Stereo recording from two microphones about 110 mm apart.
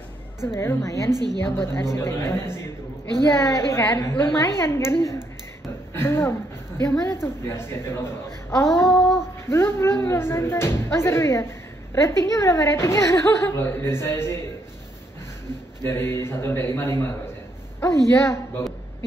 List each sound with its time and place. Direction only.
0.4 s speech: 25° left (ahead or behind)
1.1 s a woman's voice: 40° right (ahead or behind)
1.4 s speech: 25° left (ahead or behind)
8.6 s female singing: centre (ahead or behind)
9.5 s speech: 25° left (ahead or behind)
15.8 s speech: 25° left (ahead or behind)